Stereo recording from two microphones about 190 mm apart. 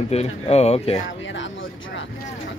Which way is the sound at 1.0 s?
80° left.